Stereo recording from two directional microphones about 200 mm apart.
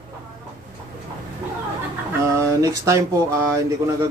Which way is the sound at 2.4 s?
15° right (ahead or behind).